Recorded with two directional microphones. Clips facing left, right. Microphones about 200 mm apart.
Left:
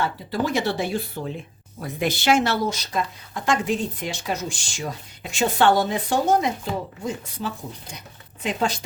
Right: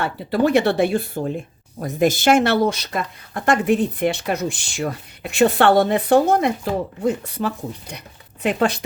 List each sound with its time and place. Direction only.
0.0 s speech: 60° right (ahead or behind)